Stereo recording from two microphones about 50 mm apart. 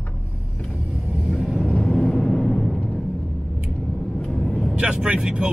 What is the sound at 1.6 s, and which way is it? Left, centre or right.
Vehicle, centre.